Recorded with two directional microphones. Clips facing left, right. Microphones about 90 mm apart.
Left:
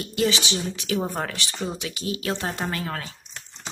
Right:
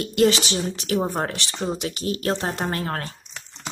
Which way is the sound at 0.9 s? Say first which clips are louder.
Right 3 dB; 30° right (ahead or behind).